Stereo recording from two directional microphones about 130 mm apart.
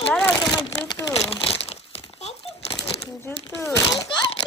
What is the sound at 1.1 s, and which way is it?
Crumpling, 50° left (ahead or behind).